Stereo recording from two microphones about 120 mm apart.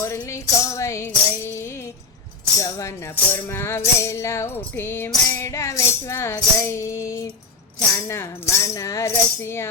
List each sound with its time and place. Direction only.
0.0 s music: 25° left (ahead or behind)